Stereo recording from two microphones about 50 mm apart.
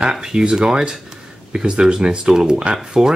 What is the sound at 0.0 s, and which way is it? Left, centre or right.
Speech, centre.